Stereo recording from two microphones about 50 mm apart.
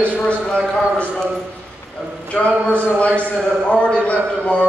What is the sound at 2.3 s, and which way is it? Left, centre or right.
A man's voice, left.